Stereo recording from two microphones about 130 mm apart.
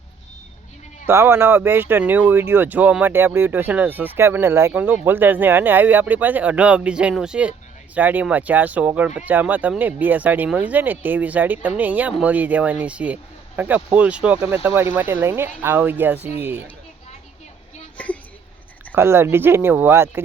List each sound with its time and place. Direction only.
1.0 s speech: 20° right (ahead or behind)
17.9 s a sound: 10° left (ahead or behind)
18.9 s speech: 20° right (ahead or behind)